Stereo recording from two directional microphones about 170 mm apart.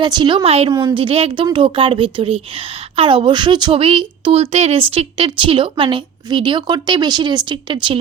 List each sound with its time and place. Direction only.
0.0 s speech: 25° right (ahead or behind)
0.7 s speech: 25° right (ahead or behind)